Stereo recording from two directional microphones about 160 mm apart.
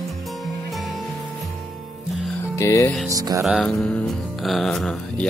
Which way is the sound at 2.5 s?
20° left (ahead or behind).